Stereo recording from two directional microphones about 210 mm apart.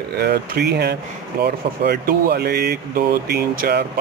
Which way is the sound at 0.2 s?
50° right (ahead or behind).